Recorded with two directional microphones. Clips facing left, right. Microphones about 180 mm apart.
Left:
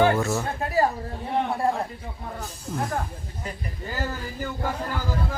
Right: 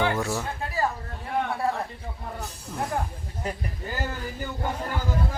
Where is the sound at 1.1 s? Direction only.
25° left (ahead or behind).